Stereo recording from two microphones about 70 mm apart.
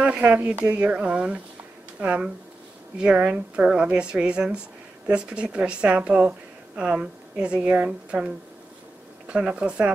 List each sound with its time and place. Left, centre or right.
0.0 s a woman's voice: centre
9.3 s a woman's voice: centre